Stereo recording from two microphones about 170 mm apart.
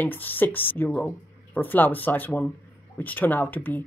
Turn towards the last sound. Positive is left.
turn(degrees=10)  # may be behind; listen again after turning